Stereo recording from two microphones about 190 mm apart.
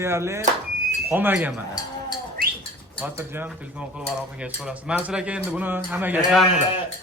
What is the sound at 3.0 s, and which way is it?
Speech, 10° right (ahead or behind).